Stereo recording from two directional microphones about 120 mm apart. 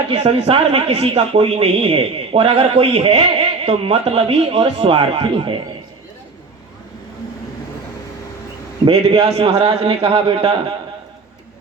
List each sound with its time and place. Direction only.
0.1 s speech: 55° right (ahead or behind)
8.8 s speech: 45° right (ahead or behind)